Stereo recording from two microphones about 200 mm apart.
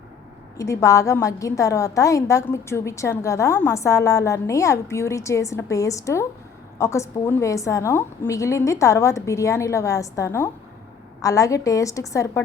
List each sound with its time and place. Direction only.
0.5 s a woman's voice: 15° left (ahead or behind)